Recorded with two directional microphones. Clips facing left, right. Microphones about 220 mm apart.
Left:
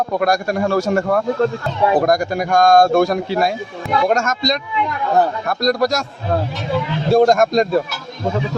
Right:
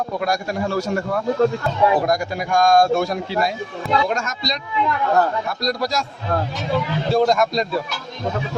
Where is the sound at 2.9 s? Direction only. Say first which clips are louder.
Left 5 dB; 55° left (ahead or behind).